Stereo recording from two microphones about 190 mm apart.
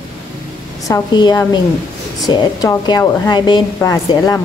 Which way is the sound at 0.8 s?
20° left (ahead or behind).